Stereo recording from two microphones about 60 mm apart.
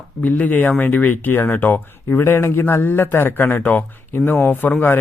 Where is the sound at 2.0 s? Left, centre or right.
Left.